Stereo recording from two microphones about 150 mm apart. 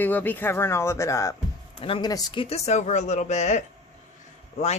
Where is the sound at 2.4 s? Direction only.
45° left (ahead or behind).